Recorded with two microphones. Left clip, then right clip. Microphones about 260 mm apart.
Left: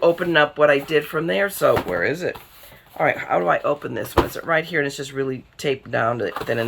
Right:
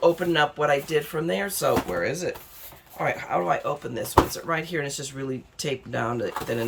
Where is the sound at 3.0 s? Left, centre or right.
Centre.